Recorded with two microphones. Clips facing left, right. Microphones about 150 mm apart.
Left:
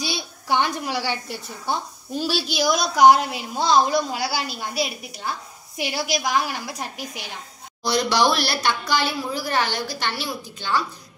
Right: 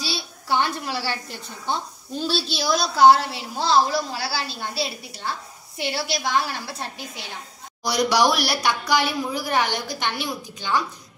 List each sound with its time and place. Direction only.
0.0 s a woman's voice: 15° left (ahead or behind)
7.8 s a woman's voice: 10° right (ahead or behind)